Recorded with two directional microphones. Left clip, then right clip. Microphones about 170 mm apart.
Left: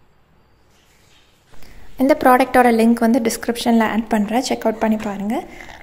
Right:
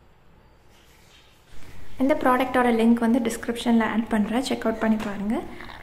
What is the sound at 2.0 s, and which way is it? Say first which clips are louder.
A woman's voice: left 8 dB; 35° left (ahead or behind).